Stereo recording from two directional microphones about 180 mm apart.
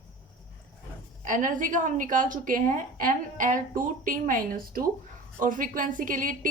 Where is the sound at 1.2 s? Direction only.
45° right (ahead or behind).